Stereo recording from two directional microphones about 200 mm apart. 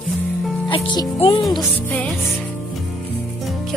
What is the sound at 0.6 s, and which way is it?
Speech, 25° left (ahead or behind).